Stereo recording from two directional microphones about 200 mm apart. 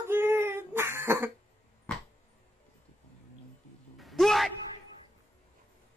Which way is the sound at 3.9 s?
Centre (ahead or behind).